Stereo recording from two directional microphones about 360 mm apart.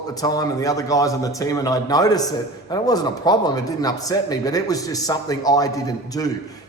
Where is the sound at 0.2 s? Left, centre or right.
Centre.